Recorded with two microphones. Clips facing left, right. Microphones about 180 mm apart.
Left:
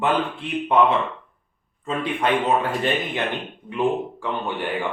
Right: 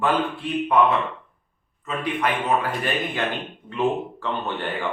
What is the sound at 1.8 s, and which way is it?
Speech, 25° left (ahead or behind).